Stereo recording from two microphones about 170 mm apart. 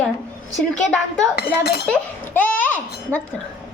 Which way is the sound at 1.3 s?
65° left (ahead or behind).